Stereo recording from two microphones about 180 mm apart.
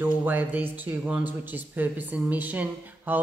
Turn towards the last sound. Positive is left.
turn(degrees=-10)  # may be behind; listen again after turning